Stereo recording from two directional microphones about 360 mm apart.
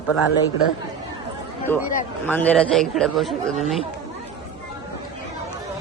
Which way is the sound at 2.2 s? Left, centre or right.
Centre.